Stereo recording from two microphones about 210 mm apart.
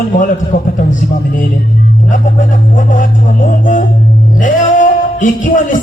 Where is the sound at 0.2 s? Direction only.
40° left (ahead or behind).